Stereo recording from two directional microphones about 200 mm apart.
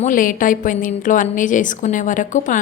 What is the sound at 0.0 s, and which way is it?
A woman's voice, 40° left (ahead or behind).